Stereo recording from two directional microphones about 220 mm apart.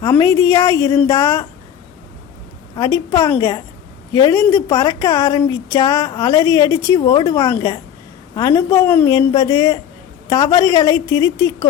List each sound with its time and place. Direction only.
0.0 s a woman's voice: 15° left (ahead or behind)
2.7 s a woman's voice: 15° left (ahead or behind)